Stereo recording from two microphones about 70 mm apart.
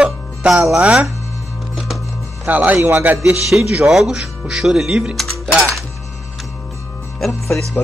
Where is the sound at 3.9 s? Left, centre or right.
Centre.